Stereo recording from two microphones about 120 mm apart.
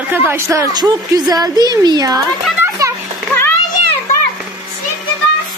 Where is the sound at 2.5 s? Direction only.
20° right (ahead or behind).